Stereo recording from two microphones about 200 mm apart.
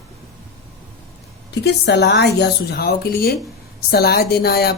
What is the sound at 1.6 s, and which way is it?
A woman's voice, 55° left (ahead or behind).